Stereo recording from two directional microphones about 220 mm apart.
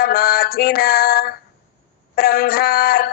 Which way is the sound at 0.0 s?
45° left (ahead or behind).